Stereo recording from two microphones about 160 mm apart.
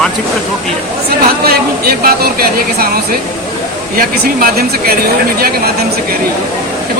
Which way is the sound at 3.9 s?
65° right (ahead or behind).